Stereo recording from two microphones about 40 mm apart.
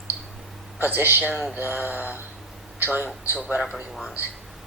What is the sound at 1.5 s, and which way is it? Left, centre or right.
Mantra, right.